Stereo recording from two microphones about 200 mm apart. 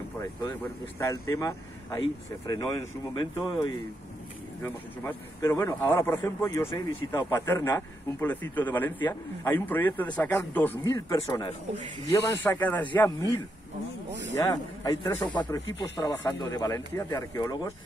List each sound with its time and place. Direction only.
0.2 s speech: 15° left (ahead or behind)
14.4 s speech: 20° left (ahead or behind)